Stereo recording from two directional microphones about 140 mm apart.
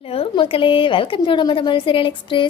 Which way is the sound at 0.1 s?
40° left (ahead or behind).